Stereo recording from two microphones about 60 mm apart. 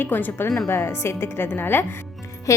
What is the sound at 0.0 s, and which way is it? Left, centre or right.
Speech, left.